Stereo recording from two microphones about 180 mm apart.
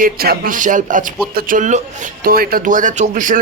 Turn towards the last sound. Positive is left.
turn(degrees=-45)  # may be behind; listen again after turning